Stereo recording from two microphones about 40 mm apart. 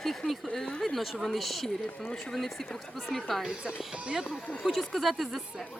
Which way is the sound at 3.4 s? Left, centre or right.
Right.